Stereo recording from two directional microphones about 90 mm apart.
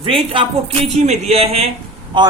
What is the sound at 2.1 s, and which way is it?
Speech, 60° right (ahead or behind).